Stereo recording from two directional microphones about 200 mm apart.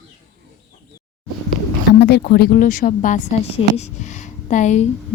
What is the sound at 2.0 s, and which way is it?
A woman's voice, 55° left (ahead or behind).